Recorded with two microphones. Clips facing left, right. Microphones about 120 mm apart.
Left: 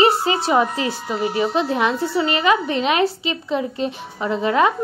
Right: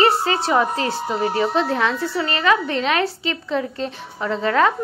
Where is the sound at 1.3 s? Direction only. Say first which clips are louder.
Left 1 dB; 15° left (ahead or behind).